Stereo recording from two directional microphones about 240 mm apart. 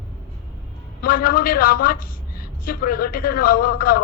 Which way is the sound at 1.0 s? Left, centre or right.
Left.